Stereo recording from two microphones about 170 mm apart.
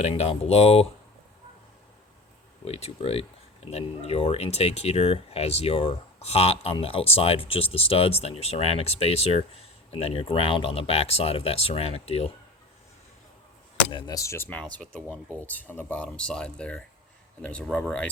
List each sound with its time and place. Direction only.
0.0 s speech: 35° left (ahead or behind)
2.6 s speech: 35° left (ahead or behind)
13.9 s speech: 20° left (ahead or behind)